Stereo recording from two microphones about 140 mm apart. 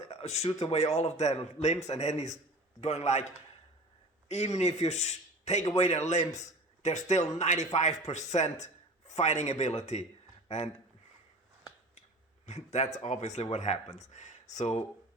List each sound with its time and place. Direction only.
0.0 s a man's voice: 45° left (ahead or behind)
4.3 s a man's voice: 50° left (ahead or behind)
12.5 s a man's voice: 55° left (ahead or behind)